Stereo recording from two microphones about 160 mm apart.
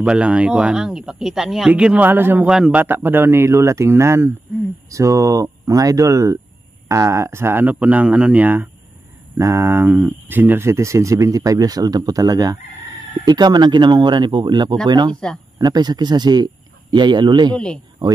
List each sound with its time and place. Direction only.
0.0 s speech: 5° right (ahead or behind); by 17.6 s 25° right (ahead or behind)